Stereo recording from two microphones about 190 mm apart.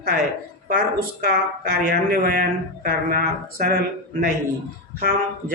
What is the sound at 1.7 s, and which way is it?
Speech, 55° right (ahead or behind).